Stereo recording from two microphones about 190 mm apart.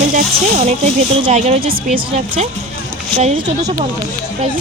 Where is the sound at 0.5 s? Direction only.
35° right (ahead or behind).